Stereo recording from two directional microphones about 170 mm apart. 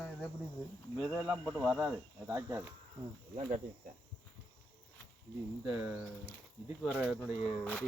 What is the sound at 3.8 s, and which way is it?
Speech, 55° right (ahead or behind).